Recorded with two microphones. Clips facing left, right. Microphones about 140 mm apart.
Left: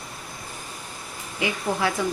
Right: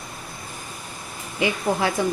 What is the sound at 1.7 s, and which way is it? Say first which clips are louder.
Speech: right 2 dB; 15° right (ahead or behind).